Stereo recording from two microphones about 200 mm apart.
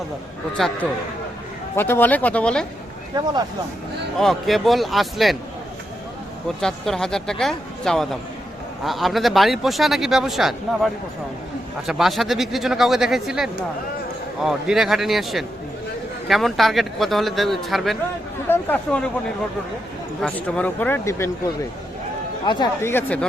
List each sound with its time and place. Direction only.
0.5 s speech: centre (ahead or behind)
3.1 s speech: 20° right (ahead or behind)
4.2 s speech: centre (ahead or behind)
6.6 s speech: centre (ahead or behind)
20.2 s speech: 5° left (ahead or behind)
22.4 s speech: 20° left (ahead or behind)
22.9 s speech: 10° left (ahead or behind)